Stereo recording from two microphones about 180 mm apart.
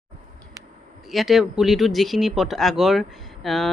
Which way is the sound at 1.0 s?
Centre (ahead or behind).